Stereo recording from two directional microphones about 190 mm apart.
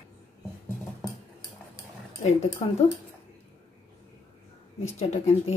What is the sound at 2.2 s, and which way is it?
Speech, 35° left (ahead or behind).